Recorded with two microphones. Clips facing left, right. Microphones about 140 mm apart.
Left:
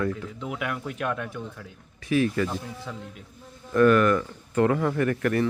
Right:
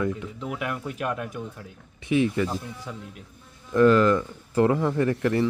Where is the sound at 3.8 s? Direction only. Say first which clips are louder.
Right 1 dB; 25° right (ahead or behind).